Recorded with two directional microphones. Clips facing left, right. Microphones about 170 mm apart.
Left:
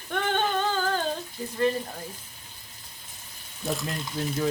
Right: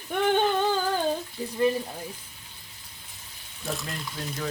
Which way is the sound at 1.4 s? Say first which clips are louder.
Right 2 dB; 20° right (ahead or behind).